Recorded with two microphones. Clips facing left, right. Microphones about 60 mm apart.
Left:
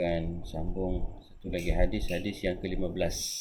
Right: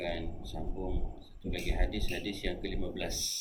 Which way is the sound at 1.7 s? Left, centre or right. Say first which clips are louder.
Left 8 dB; left.